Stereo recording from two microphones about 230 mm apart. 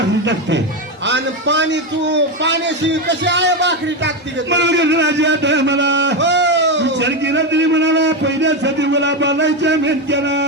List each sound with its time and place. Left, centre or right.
1.0 s a man's voice: right